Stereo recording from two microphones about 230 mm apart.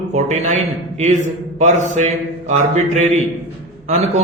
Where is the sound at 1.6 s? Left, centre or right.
Right.